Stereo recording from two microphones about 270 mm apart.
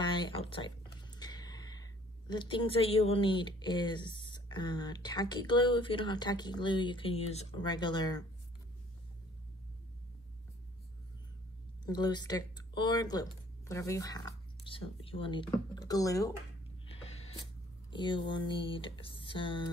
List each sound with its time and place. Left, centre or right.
0.0 s speech: centre
11.8 s speech: centre
16.8 s a sound: left
17.9 s speech: centre